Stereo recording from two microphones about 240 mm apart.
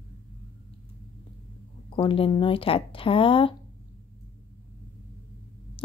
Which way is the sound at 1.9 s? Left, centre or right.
Left.